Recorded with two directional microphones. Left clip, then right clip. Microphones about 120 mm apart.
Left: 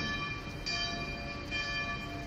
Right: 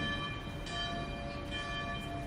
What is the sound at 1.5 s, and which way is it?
Church bell, 45° right (ahead or behind).